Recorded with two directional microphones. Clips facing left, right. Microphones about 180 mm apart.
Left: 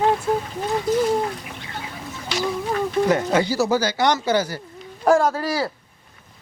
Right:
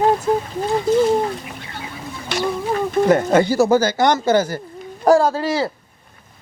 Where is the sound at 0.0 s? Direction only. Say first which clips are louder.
Right 3 dB; 40° right (ahead or behind).